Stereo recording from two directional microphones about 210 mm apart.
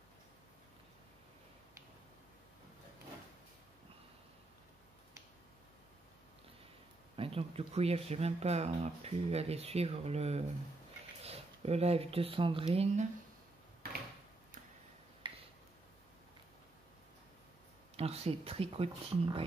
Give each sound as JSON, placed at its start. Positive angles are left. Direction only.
{"t": 7.2, "sound": "speech", "side_deg": -25}
{"t": 15.2, "sound": "a sound", "side_deg": -20}
{"t": 17.9, "sound": "speech", "side_deg": -30}